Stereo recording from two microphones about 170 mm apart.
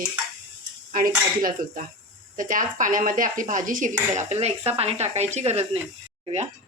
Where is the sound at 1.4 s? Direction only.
55° right (ahead or behind).